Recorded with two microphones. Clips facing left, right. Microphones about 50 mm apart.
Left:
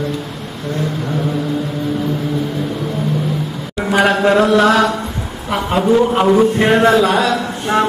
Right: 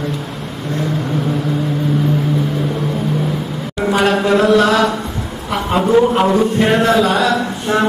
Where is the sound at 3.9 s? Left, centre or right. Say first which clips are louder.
Left 2 dB; left.